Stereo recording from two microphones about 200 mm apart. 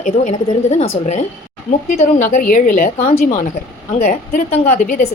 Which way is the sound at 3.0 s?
35° left (ahead or behind).